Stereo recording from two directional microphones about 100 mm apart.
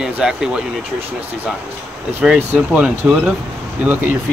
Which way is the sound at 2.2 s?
15° right (ahead or behind).